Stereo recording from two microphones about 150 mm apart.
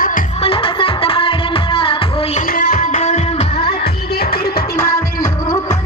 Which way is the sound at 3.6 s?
90° left.